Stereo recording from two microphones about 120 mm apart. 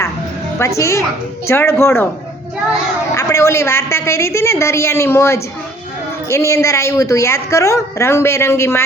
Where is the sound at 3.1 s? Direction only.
25° left (ahead or behind).